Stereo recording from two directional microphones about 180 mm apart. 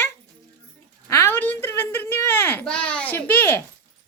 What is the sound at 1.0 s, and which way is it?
A child's voice, 15° left (ahead or behind).